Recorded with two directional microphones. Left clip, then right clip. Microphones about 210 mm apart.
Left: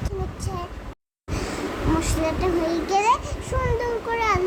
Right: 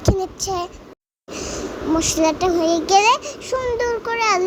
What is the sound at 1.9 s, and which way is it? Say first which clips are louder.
A child's voice: right 10 dB; 35° right (ahead or behind).